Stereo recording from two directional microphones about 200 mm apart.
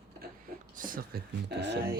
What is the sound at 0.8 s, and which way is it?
Speech, 45° right (ahead or behind).